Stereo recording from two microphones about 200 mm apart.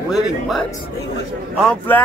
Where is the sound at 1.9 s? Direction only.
10° left (ahead or behind).